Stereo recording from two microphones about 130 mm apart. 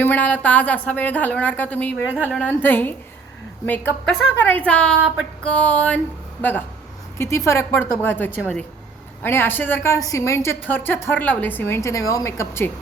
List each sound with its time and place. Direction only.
0.0 s a woman's voice: 15° left (ahead or behind)
2.0 s speech: 15° right (ahead or behind)
2.3 s a woman's voice: 15° left (ahead or behind)
7.2 s a woman's voice: 20° left (ahead or behind)